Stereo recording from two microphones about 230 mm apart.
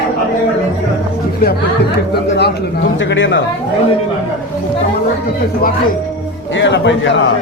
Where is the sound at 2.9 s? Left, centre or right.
Left.